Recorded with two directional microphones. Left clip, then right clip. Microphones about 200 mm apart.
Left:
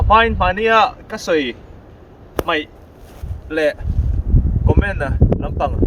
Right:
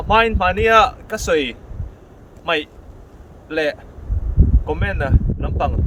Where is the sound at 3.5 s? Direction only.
10° right (ahead or behind).